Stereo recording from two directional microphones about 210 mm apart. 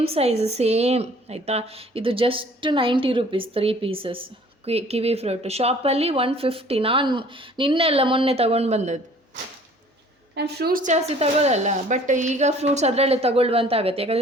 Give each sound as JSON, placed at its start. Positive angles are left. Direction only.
{"t": 0.0, "sound": "a woman's voice", "side_deg": -30}
{"t": 10.3, "sound": "speech", "side_deg": -50}